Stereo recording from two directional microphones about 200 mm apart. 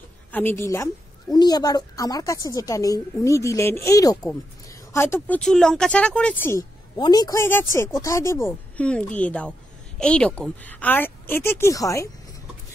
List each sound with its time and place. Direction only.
0.3 s speech: 10° left (ahead or behind)
7.0 s speech: 20° left (ahead or behind)